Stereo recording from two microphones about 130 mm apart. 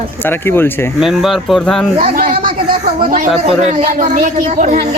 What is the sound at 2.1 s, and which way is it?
Speech, 90° right.